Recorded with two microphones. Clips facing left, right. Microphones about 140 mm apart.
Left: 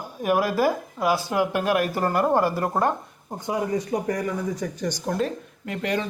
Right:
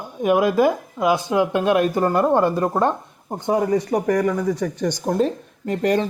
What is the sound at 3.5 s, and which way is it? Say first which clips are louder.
Speech: right 6 dB; 70° right (ahead or behind).